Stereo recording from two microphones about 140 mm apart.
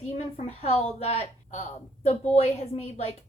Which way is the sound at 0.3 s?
50° left (ahead or behind).